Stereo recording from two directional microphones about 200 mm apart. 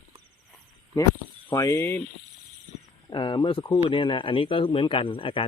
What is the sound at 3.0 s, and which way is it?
Speech, 25° left (ahead or behind).